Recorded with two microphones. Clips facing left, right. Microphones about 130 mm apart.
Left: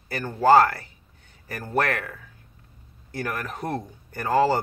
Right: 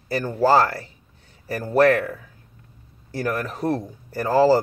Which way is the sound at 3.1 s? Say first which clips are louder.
Right 5 dB; 35° right (ahead or behind).